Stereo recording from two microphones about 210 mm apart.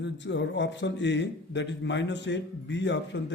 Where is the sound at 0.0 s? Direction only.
55° left (ahead or behind).